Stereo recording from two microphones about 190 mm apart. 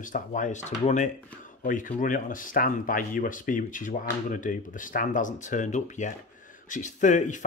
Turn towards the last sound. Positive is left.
turn(degrees=40)  # may be behind; listen again after turning